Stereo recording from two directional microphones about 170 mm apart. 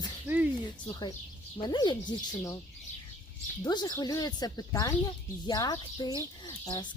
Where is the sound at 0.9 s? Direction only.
25° left (ahead or behind).